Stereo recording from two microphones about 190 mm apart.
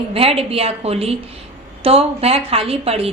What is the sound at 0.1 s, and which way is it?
A woman's voice, 30° right (ahead or behind).